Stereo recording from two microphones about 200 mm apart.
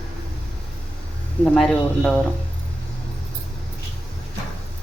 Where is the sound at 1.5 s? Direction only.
Centre (ahead or behind).